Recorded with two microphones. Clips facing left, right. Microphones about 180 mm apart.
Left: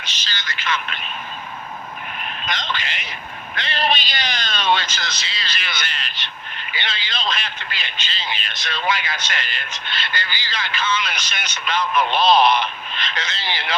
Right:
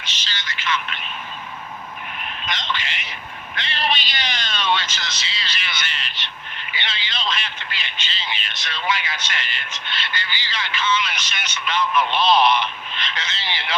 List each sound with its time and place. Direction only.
0.2 s speech: 40° left (ahead or behind)
2.5 s a man's voice: 40° left (ahead or behind)